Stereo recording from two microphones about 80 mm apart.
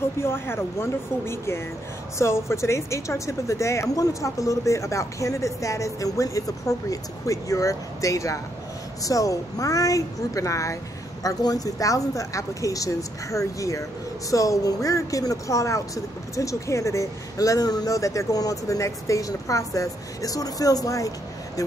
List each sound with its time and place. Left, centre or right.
0.2 s a woman's voice: left